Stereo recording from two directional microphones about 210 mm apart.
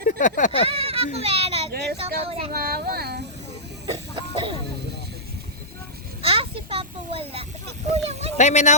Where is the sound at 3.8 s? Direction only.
25° right (ahead or behind).